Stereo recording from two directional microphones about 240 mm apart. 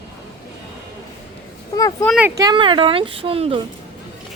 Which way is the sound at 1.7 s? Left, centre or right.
Centre.